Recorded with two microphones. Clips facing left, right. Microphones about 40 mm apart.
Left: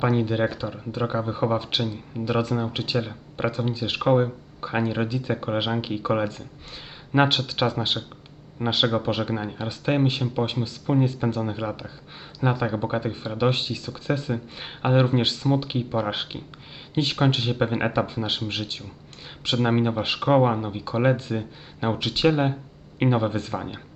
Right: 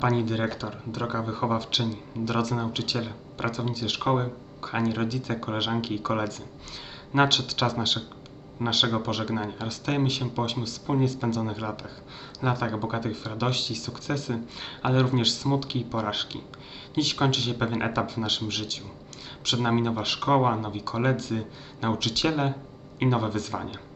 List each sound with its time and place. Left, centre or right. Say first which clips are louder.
0.0 s speech: left 3 dB; centre
9.3 s speech: left 1 dB; centre
9.6 s speech: left 7 dB; centre